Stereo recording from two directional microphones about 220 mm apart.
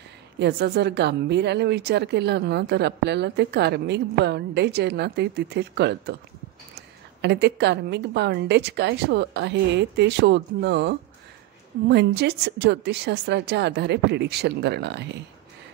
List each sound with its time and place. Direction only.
0.4 s speech: 50° right (ahead or behind)
7.2 s speech: 50° right (ahead or behind)